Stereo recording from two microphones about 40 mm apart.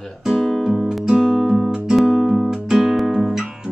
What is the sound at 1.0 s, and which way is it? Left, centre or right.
Music, centre.